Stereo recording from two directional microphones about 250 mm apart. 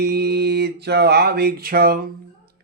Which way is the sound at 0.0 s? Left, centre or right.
Right.